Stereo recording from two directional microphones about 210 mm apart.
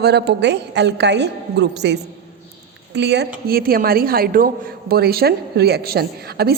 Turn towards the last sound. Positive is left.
turn(degrees=-50)  # may be behind; listen again after turning